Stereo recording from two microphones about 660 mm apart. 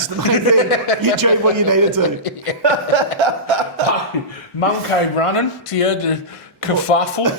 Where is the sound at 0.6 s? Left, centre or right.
Left.